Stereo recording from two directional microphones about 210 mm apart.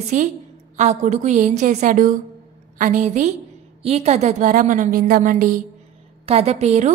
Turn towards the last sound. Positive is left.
turn(degrees=-30)  # may be behind; listen again after turning